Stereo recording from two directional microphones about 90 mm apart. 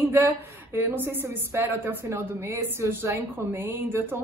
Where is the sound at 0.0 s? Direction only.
25° right (ahead or behind).